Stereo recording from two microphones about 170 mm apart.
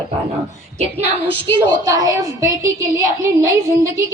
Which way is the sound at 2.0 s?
20° right (ahead or behind).